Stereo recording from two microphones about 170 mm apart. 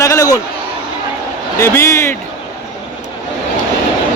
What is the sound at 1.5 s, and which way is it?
Speech, 15° left (ahead or behind).